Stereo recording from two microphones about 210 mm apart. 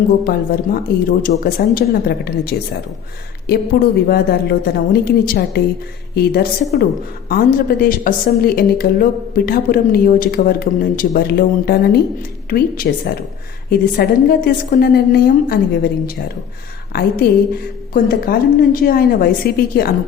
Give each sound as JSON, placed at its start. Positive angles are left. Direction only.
{"t": 0.3, "sound": "a woman's voice", "side_deg": 45}